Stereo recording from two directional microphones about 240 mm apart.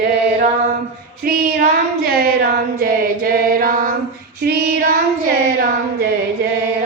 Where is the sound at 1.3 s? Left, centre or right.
Right.